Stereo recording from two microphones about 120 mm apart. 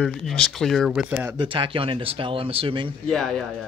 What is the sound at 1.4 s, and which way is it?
Speech, 45° right (ahead or behind).